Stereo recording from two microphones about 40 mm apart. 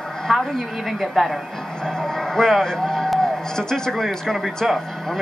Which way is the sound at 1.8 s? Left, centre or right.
Centre.